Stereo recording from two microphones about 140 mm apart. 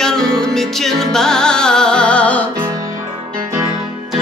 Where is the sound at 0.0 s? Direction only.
5° left (ahead or behind).